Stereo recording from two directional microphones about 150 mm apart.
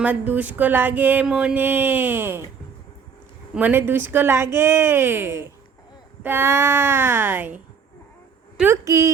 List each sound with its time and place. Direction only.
0.0 s mantra: 10° right (ahead or behind)
3.5 s mantra: 10° right (ahead or behind)
8.5 s a woman's voice: 15° right (ahead or behind)